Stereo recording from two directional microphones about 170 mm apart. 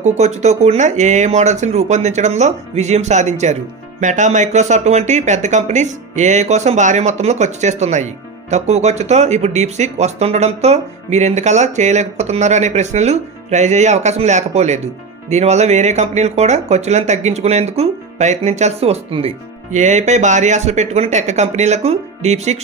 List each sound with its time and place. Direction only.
0.0 s speech: 40° right (ahead or behind)